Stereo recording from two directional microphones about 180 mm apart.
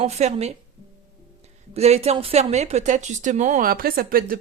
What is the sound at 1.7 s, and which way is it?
Speech, 35° right (ahead or behind).